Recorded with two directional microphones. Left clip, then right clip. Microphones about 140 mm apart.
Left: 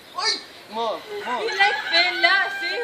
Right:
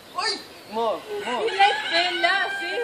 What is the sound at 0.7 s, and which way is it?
Speech, 25° right (ahead or behind).